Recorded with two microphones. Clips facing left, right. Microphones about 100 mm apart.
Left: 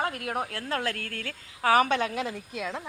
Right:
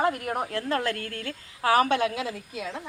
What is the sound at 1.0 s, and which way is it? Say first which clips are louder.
Speech: right 2 dB; 90° left.